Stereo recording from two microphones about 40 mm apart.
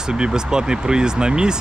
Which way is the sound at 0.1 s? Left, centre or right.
Centre.